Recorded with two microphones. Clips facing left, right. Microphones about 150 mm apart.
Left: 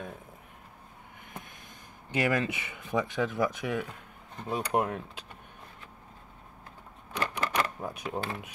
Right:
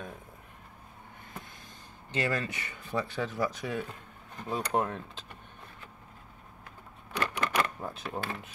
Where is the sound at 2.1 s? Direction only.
15° left (ahead or behind).